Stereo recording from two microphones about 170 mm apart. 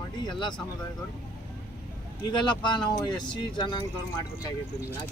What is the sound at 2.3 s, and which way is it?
Speech, 25° left (ahead or behind).